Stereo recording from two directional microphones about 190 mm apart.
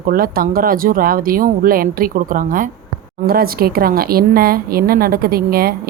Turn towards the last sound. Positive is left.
turn(degrees=-50)  # may be behind; listen again after turning